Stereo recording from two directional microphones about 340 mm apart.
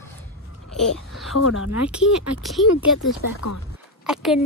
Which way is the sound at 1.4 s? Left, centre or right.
Left.